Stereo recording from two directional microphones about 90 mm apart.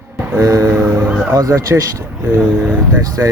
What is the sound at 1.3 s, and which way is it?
Speech, 35° right (ahead or behind).